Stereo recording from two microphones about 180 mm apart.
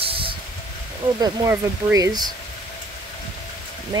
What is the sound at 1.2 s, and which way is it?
Speech, 20° right (ahead or behind).